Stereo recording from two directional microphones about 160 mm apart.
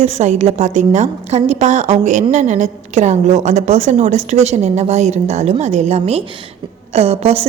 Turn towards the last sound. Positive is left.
turn(degrees=-40)  # may be behind; listen again after turning